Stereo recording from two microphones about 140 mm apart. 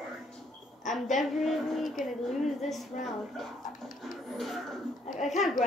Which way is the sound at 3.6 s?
65° left (ahead or behind).